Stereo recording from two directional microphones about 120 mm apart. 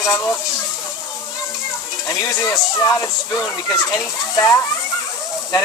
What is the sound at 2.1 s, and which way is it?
Speech, 25° left (ahead or behind).